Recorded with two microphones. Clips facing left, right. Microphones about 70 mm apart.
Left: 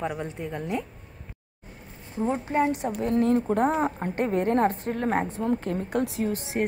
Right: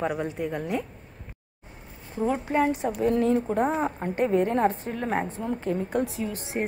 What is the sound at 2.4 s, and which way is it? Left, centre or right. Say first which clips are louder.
Speech: even; right.